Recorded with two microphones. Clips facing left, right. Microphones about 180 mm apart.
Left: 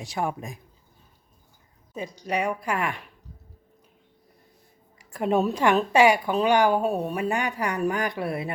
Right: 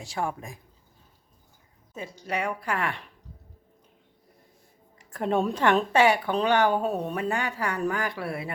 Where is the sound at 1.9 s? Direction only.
15° left (ahead or behind).